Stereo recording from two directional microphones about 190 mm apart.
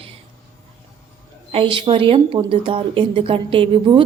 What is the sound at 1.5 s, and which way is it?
A woman's voice, 25° right (ahead or behind).